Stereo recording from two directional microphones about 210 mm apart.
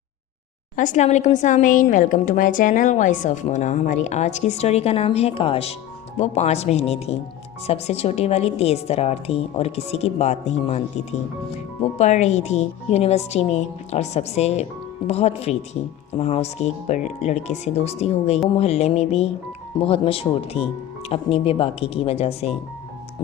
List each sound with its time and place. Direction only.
0.8 s a woman's voice: 35° left (ahead or behind)